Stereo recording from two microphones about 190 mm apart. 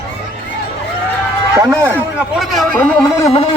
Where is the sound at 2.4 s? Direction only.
Centre (ahead or behind).